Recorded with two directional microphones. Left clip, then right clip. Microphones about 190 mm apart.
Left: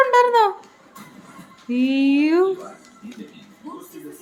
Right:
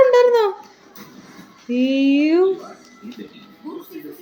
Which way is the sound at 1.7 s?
15° left (ahead or behind).